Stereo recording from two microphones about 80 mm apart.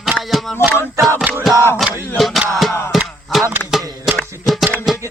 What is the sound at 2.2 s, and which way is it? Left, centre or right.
Music, centre.